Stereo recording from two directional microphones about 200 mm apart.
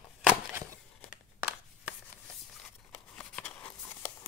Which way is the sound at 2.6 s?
5° left (ahead or behind).